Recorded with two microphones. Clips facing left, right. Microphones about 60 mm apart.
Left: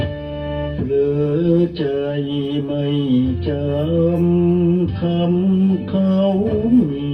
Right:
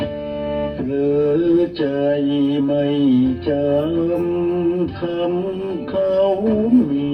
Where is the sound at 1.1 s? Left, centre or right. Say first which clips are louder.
Right 2 dB; right.